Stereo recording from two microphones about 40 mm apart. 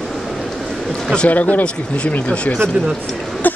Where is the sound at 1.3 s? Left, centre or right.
Left.